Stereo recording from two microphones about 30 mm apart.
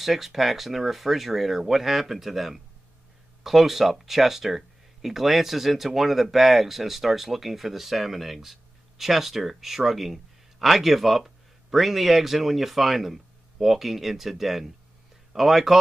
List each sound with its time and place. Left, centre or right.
0.0 s speech: centre